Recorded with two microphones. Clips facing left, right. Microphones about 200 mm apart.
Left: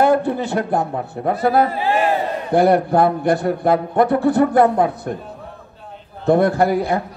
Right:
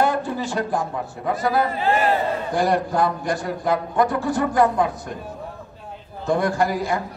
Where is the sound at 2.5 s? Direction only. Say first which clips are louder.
Left 8 dB; 60° left (ahead or behind).